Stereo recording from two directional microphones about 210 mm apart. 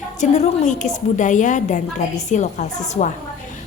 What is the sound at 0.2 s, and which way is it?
A woman's voice, 35° left (ahead or behind).